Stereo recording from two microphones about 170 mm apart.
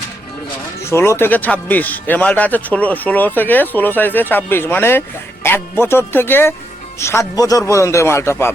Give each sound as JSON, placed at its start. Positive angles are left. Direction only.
{"t": 0.9, "sound": "speech", "side_deg": 15}